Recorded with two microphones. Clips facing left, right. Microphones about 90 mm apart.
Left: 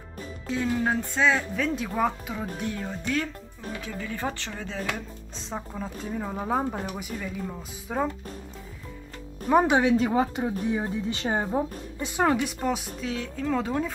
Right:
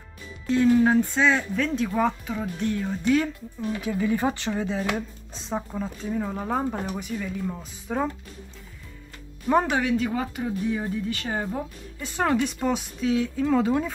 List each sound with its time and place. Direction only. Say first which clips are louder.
0.5 s speech: right 7 dB; centre (ahead or behind)
3.8 s speech: right 8 dB; 15° right (ahead or behind)
5.5 s speech: right 4 dB; centre (ahead or behind)
9.7 s speech: left 3 dB; 25° left (ahead or behind)
12.2 s speech: right 1 dB; 5° left (ahead or behind)